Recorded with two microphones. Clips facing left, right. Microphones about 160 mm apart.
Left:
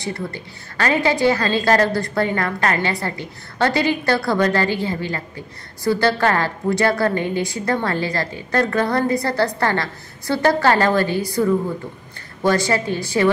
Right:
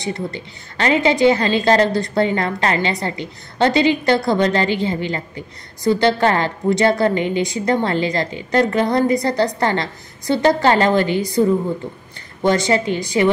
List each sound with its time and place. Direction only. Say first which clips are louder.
0.0 s a woman's voice: right 2 dB; 20° right (ahead or behind)
12.4 s a woman's voice: right 2 dB; 20° right (ahead or behind)